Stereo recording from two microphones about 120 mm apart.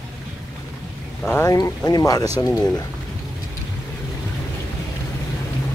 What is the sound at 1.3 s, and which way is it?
Speech, 20° left (ahead or behind).